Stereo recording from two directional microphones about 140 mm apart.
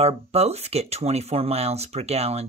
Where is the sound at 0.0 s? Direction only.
50° right (ahead or behind).